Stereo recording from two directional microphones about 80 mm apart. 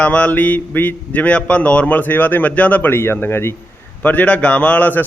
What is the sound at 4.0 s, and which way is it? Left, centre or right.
A man's voice, centre.